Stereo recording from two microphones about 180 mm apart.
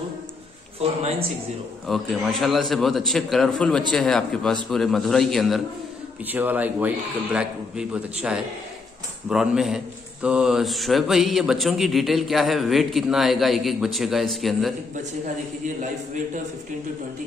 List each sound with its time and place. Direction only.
0.8 s a man's voice: 35° right (ahead or behind)
1.9 s speech: centre (ahead or behind)
6.2 s a man's voice: 10° right (ahead or behind)